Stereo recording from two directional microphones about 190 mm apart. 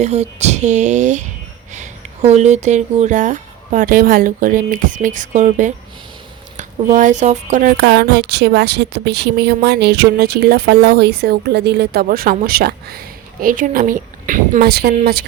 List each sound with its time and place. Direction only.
0.0 s speech: 35° right (ahead or behind); by 15.3 s 55° right (ahead or behind)